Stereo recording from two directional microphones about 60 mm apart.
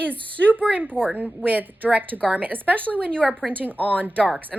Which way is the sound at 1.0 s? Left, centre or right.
Right.